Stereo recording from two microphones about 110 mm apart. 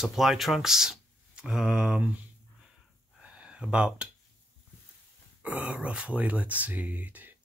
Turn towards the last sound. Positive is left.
turn(degrees=-15)  # may be behind; listen again after turning